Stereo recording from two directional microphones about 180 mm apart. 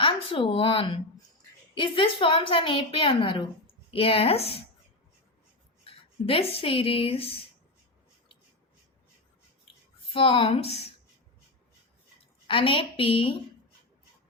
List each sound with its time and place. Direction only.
0.0 s a woman's voice: 30° left (ahead or behind)
5.8 s speech: 30° left (ahead or behind)
10.1 s a woman's voice: 30° left (ahead or behind)
12.5 s a woman's voice: 30° left (ahead or behind)